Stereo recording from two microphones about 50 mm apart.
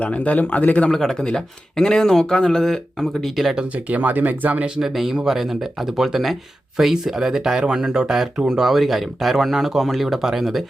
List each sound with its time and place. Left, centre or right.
0.0 s a man's voice: left
0.9 s speech: centre
3.5 s speech: right
3.9 s speech: right
4.8 s speech: centre